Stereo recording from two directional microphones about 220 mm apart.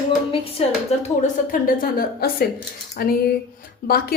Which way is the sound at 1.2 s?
40° left (ahead or behind).